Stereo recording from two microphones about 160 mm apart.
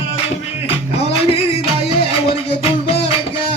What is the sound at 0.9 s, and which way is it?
Music, 35° left (ahead or behind).